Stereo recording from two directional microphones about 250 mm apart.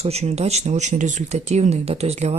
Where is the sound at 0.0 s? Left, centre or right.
Right.